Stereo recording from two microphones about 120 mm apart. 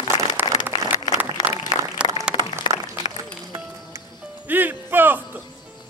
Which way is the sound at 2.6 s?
40° left (ahead or behind).